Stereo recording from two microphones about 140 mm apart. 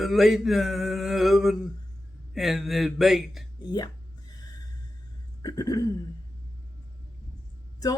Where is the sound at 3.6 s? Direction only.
30° left (ahead or behind).